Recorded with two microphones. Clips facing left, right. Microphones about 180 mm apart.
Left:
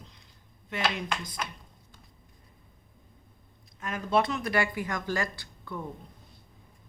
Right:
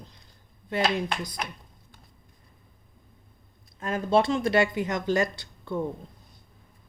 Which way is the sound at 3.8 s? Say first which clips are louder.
Right 4 dB; 30° right (ahead or behind).